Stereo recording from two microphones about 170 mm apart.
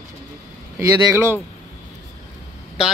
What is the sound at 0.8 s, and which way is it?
Speech, 15° right (ahead or behind).